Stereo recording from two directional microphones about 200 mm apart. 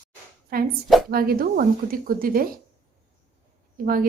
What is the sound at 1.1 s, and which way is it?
A woman's voice, 45° right (ahead or behind).